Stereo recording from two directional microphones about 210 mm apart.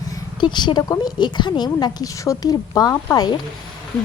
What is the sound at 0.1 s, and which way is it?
A woman's voice, 20° left (ahead or behind).